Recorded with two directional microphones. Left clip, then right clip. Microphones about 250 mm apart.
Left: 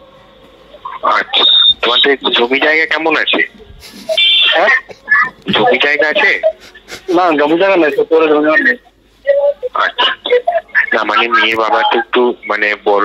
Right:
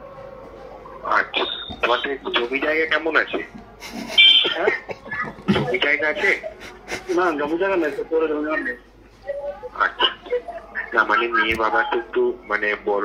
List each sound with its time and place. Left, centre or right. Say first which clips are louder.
1.1 s speech: left 11 dB; left
4.0 s a sound: left 4 dB; left
5.1 s speech: left 14 dB; left
9.8 s speech: left 3 dB; left